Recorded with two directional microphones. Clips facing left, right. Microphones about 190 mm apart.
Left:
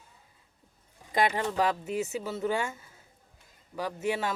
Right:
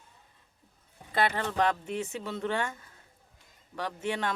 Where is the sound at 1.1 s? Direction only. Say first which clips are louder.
Left 2 dB; 15° left (ahead or behind).